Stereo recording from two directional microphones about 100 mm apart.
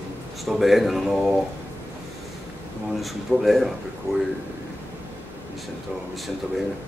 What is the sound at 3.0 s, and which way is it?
Speech, centre (ahead or behind).